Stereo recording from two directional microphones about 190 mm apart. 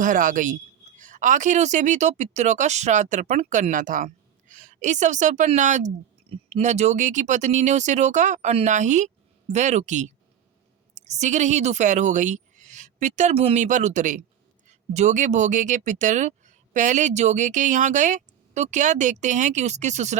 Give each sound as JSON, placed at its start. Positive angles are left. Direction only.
{"t": 0.0, "sound": "speech", "side_deg": -45}